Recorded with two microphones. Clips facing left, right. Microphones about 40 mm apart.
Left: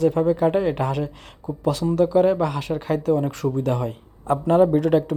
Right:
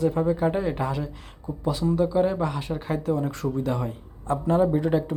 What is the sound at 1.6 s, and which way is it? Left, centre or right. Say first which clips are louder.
Speech: left 3 dB; left.